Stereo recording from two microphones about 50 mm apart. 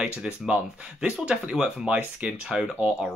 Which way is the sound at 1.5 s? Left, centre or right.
Centre.